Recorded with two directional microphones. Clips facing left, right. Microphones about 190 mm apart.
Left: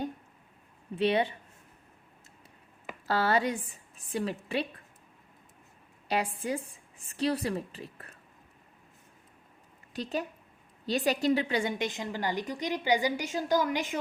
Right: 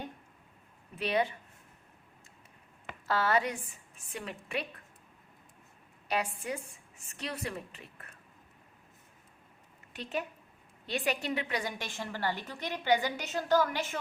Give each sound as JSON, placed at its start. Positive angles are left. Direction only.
{"t": 0.9, "sound": "speech", "side_deg": 30}
{"t": 3.1, "sound": "a woman's voice", "side_deg": 30}
{"t": 6.1, "sound": "a woman's voice", "side_deg": 30}
{"t": 9.9, "sound": "a woman's voice", "side_deg": 35}